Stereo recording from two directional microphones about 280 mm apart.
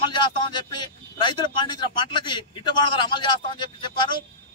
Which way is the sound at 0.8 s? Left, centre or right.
Centre.